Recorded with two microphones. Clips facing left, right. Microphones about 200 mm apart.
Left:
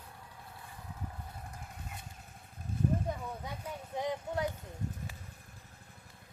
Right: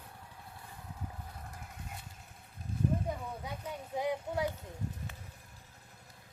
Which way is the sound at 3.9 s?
10° right (ahead or behind).